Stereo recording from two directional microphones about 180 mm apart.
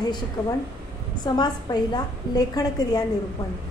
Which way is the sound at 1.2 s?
25° left (ahead or behind).